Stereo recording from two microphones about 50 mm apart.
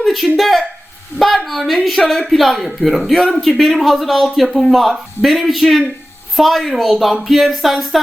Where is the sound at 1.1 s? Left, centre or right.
Left.